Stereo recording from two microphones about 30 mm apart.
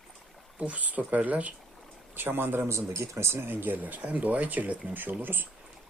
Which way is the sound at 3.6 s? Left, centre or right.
Right.